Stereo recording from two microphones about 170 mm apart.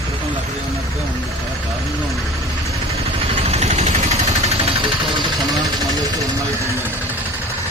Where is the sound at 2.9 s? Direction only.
35° right (ahead or behind).